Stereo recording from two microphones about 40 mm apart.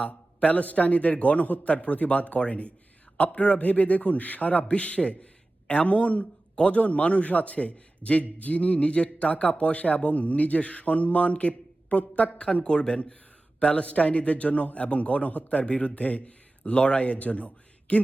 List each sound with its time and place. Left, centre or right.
0.0 s a man's voice: left